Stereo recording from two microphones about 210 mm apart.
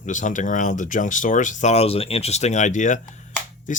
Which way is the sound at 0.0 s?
35° left (ahead or behind).